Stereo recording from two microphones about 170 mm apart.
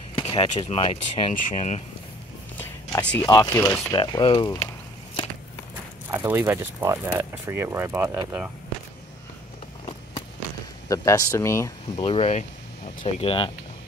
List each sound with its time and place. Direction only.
0.2 s speech: 35° left (ahead or behind)
1.3 s speech: 45° left (ahead or behind)
2.5 s music: 10° left (ahead or behind)
3.2 s speech: 20° left (ahead or behind)
6.0 s speech: 10° right (ahead or behind)
10.9 s speech: 20° left (ahead or behind)
12.0 s speech: 35° left (ahead or behind)